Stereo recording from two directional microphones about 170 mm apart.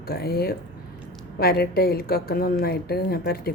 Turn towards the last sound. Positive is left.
turn(degrees=65)  # may be behind; listen again after turning